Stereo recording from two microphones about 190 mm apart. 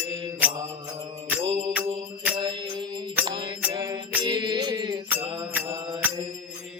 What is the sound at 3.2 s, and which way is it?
Mantra, 25° right (ahead or behind).